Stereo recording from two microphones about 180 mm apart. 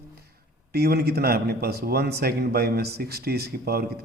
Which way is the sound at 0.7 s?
60° right (ahead or behind).